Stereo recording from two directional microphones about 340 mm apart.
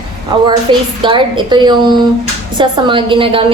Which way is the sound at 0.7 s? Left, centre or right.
Centre.